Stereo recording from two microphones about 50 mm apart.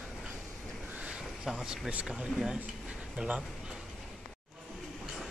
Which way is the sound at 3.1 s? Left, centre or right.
Right.